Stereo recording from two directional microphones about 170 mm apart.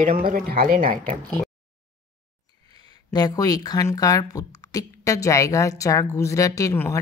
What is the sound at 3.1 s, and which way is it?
A woman's voice, 25° left (ahead or behind).